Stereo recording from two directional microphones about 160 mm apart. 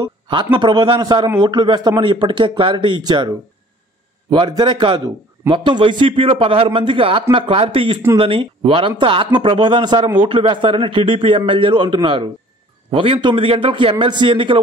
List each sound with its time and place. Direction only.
0.0 s a man's voice: 30° right (ahead or behind)